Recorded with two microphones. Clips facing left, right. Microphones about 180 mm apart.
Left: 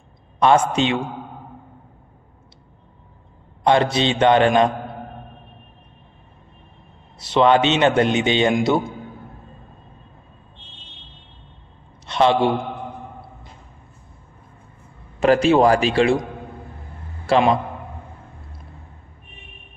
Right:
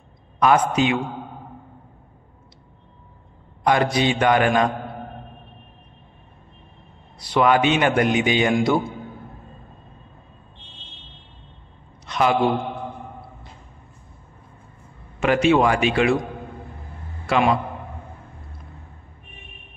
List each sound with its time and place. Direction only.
0.4 s a man's voice: 25° left (ahead or behind)
3.6 s a man's voice: 25° left (ahead or behind)
7.2 s a man's voice: 25° left (ahead or behind)
12.1 s a man's voice: 30° left (ahead or behind)
15.1 s a man's voice: 35° left (ahead or behind)
17.3 s a man's voice: 30° left (ahead or behind)